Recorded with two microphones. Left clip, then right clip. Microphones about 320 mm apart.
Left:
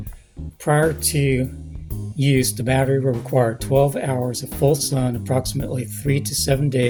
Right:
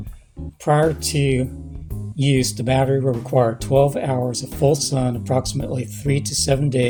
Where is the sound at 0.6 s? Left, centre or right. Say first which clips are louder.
Right 1 dB; left.